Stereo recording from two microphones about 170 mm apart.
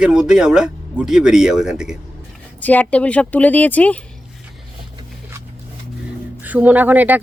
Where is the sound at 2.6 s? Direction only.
10° left (ahead or behind).